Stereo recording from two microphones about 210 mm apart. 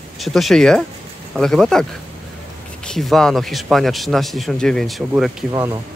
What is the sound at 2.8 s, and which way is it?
Speech, centre (ahead or behind).